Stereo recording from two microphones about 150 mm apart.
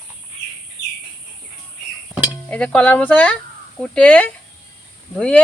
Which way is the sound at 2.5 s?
10° left (ahead or behind).